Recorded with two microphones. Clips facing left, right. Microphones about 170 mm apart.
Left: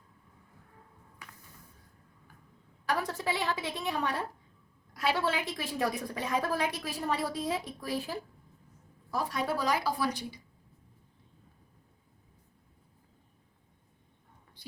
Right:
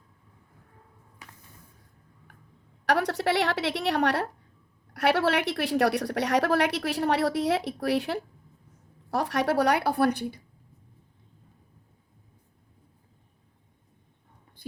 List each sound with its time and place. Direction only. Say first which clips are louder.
2.8 s a woman's voice: right 7 dB; 75° right (ahead or behind)